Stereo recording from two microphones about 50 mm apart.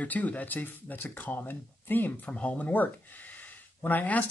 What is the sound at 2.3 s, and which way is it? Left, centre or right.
Speech, left.